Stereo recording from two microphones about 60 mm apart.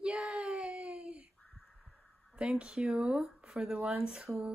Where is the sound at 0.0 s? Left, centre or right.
Centre.